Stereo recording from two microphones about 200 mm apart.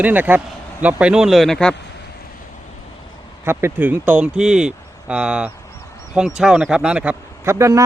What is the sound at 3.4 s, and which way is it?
A man's voice, 10° right (ahead or behind).